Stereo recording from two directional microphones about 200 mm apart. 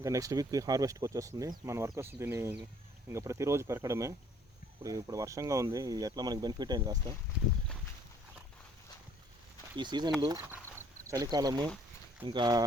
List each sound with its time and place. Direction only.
0.0 s speech: 15° right (ahead or behind)
9.7 s speech: 20° right (ahead or behind)